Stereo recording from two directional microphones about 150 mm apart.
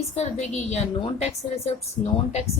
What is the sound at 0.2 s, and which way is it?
A woman's voice, 45° left (ahead or behind).